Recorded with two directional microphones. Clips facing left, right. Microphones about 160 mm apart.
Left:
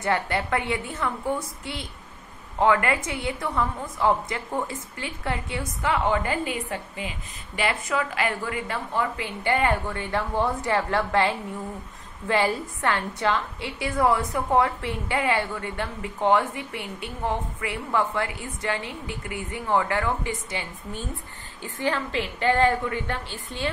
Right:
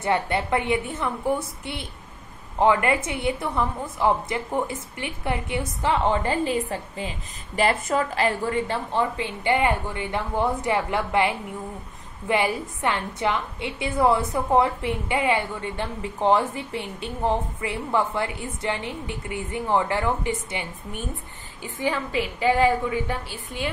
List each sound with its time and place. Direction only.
0.0 s a woman's voice: 20° right (ahead or behind)